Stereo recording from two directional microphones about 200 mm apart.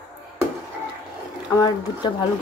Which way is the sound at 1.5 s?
20° left (ahead or behind).